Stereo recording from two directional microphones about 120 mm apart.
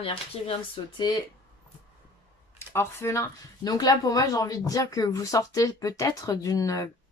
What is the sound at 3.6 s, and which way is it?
Speech, 35° left (ahead or behind).